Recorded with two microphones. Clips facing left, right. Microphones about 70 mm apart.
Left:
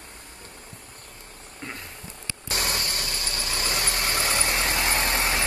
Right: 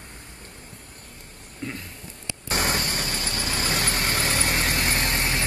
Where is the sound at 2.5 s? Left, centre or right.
Right.